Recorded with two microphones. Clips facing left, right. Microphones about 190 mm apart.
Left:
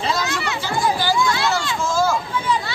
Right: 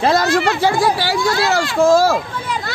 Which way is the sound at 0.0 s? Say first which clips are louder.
Right 9 dB; 60° right (ahead or behind).